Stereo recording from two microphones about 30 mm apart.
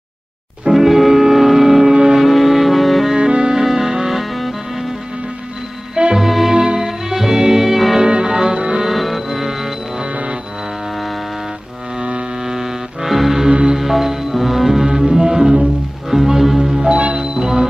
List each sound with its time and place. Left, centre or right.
0.7 s music: centre
1.9 s a sound: right
2.1 s music: centre
3.2 s music: right
3.6 s music: centre
6.1 s music: centre
8.1 s music: right
8.8 s music: centre
11.9 s music: right
12.5 s music: centre
13.5 s music: right
13.7 s music: centre
14.8 s music: right